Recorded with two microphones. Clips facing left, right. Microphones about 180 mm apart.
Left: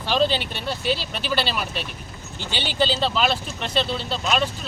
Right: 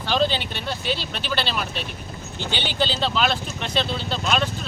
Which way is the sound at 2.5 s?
5° left (ahead or behind).